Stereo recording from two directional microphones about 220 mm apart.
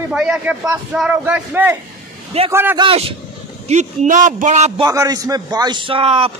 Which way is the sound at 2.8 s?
25° right (ahead or behind).